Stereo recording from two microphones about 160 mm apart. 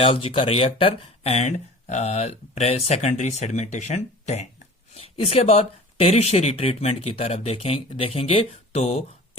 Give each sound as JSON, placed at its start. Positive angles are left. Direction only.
{"t": 0.0, "sound": "speech", "side_deg": 35}